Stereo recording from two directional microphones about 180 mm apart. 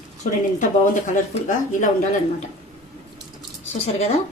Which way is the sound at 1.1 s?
45° left (ahead or behind).